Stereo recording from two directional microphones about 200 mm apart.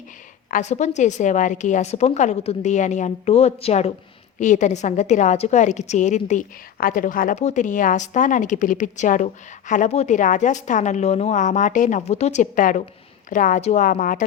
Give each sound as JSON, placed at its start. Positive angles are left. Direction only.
{"t": 0.5, "sound": "a woman's voice", "side_deg": 35}